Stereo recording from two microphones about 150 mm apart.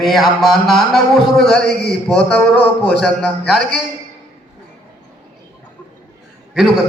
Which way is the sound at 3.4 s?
90° left.